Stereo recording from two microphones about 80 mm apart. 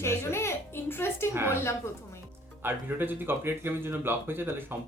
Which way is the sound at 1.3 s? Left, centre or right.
Right.